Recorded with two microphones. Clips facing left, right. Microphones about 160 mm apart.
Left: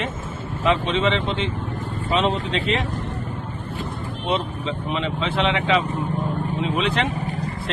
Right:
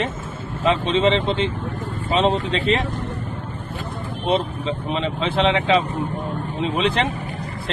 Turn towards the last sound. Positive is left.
turn(degrees=-30)  # may be behind; listen again after turning